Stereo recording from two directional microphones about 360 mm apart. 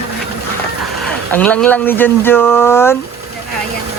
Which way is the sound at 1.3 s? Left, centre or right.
Centre.